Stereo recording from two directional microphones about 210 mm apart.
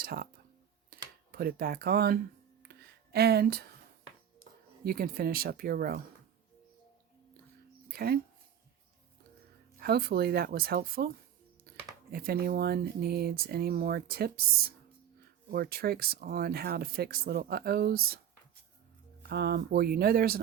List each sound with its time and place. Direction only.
0.0 s speech: 45° right (ahead or behind)
0.9 s computer keyboard: 45° right (ahead or behind)
2.6 s music: 50° right (ahead or behind)
4.9 s speech: 45° right (ahead or behind)
7.9 s speech: 45° right (ahead or behind)
9.7 s speech: 45° right (ahead or behind)
12.1 s speech: 45° right (ahead or behind)
15.4 s speech: 45° right (ahead or behind)
19.3 s speech: 50° right (ahead or behind)